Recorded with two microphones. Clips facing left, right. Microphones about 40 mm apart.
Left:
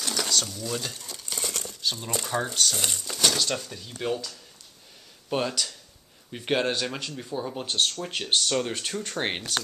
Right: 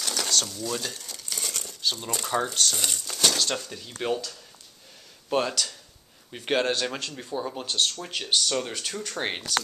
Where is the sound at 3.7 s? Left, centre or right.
Centre.